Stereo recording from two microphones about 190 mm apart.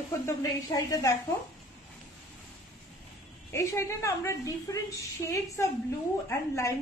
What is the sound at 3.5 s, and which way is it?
A woman's voice, 15° left (ahead or behind).